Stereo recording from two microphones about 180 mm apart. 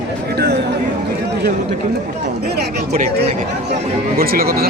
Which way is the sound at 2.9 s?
35° right (ahead or behind).